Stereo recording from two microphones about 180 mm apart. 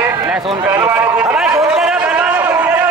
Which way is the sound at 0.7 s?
15° right (ahead or behind).